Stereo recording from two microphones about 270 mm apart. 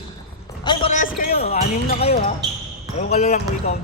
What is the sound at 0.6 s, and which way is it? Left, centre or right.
A man's voice, left.